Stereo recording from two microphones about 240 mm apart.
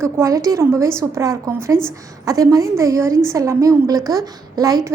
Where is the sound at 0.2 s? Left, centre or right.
Centre.